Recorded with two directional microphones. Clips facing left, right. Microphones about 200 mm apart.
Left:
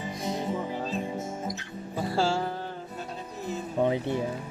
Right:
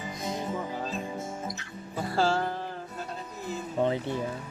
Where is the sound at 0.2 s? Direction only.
10° left (ahead or behind).